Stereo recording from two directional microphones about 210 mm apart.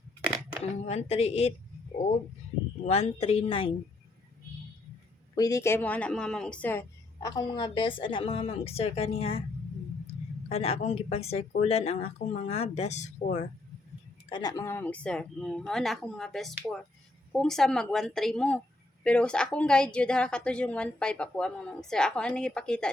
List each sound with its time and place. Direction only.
0.8 s speech: 30° left (ahead or behind)
2.8 s speech: 30° left (ahead or behind)
5.3 s speech: 15° left (ahead or behind)
10.5 s speech: 30° left (ahead or behind)
14.3 s a woman's voice: 20° left (ahead or behind); by 22.9 s 5° left (ahead or behind)